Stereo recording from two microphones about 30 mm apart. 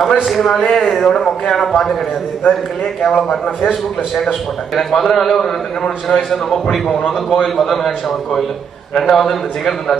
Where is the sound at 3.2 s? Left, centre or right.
Left.